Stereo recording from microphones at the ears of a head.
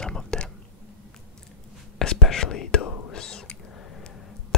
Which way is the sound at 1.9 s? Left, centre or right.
Left.